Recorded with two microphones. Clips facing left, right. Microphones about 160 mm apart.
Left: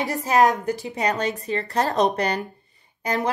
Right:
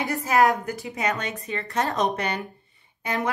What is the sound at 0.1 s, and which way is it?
Speech, 30° left (ahead or behind).